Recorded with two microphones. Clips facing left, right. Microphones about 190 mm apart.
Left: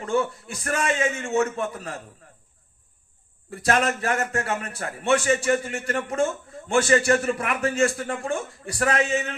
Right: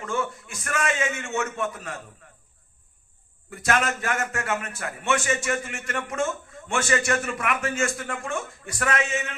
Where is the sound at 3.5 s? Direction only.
35° left (ahead or behind).